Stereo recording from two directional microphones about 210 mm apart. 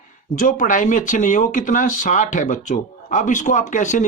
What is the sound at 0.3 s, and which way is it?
Speech, 40° left (ahead or behind).